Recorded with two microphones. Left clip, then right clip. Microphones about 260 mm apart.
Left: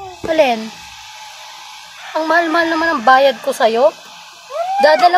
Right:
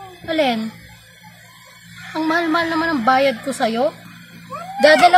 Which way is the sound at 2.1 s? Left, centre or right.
Right.